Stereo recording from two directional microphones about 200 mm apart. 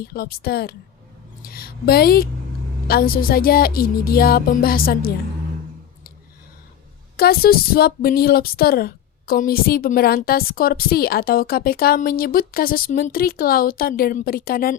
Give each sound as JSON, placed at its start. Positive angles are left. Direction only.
{"t": 0.0, "sound": "speech", "side_deg": 50}
{"t": 7.2, "sound": "speech", "side_deg": 50}